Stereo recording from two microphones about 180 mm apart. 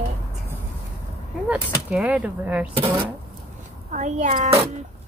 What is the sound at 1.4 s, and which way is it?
Speech, 5° right (ahead or behind).